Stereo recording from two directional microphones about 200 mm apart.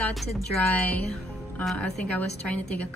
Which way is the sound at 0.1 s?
Centre (ahead or behind).